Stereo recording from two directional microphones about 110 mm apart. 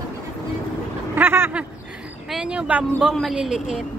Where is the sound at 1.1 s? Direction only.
20° right (ahead or behind).